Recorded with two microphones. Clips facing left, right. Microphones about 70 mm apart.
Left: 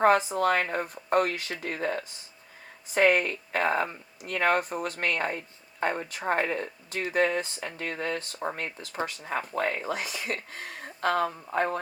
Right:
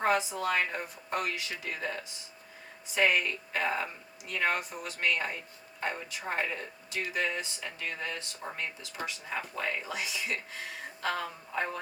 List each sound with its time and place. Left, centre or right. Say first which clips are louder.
0.0 s speech: left 7 dB; left